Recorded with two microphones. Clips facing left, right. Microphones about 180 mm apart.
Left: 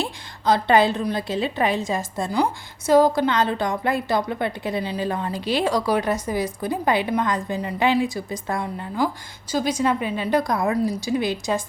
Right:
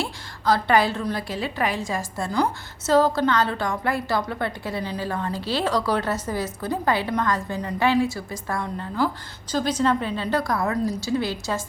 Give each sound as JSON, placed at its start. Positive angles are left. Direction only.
{"t": 0.0, "sound": "a woman's voice", "side_deg": 20}